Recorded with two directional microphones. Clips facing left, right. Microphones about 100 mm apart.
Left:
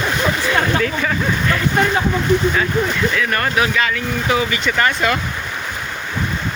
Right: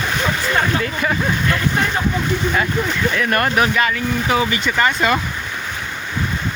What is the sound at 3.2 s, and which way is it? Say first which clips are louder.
Speech: right 1 dB; 35° right (ahead or behind).